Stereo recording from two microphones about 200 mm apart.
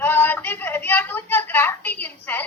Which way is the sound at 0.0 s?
10° left (ahead or behind).